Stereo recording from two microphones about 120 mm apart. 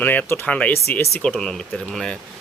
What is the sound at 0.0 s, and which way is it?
Speech, 15° left (ahead or behind).